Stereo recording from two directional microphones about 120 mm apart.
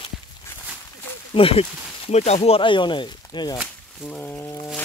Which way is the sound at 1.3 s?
50° left (ahead or behind).